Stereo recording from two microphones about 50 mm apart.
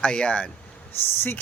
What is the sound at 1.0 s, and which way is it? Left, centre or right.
Speech, left.